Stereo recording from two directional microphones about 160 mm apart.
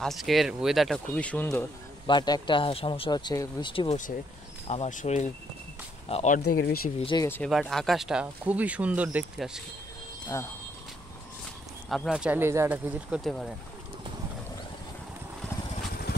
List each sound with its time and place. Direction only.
0.0 s speech: centre (ahead or behind)
2.0 s speech: 25° left (ahead or behind)
4.6 s speech: 45° left (ahead or behind)
6.3 s speech: 70° left (ahead or behind)
7.1 s speech: 25° left (ahead or behind)
7.4 s speech: centre (ahead or behind)
10.2 s speech: 20° left (ahead or behind)
11.9 s speech: centre (ahead or behind)
13.2 s speech: centre (ahead or behind)